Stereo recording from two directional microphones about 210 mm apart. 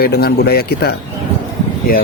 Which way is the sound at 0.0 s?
50° left (ahead or behind).